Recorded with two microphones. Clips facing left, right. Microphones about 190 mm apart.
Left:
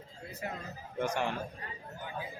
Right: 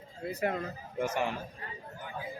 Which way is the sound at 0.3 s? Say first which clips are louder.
Right 9 dB; 70° right (ahead or behind).